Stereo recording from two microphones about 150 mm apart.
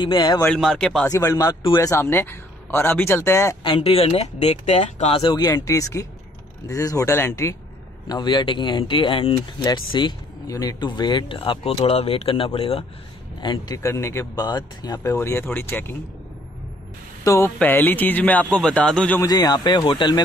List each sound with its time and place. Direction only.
0.0 s speech: 30° left (ahead or behind)
0.4 s speech: 5° left (ahead or behind)
1.1 s speech: 20° left (ahead or behind)
3.6 s speech: 35° left (ahead or behind)
5.2 s speech: 25° left (ahead or behind)
8.1 s speech: 30° left (ahead or behind)
9.6 s speech: 30° left (ahead or behind)
13.8 s speech: 20° left (ahead or behind)
15.1 s speech: 15° left (ahead or behind)
17.2 s speech: 20° left (ahead or behind)
19.2 s speech: 25° left (ahead or behind)